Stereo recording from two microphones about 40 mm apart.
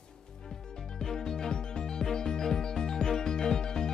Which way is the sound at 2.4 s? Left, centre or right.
Centre.